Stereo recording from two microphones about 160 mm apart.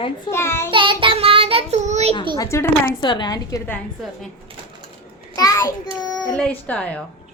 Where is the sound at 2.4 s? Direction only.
15° left (ahead or behind).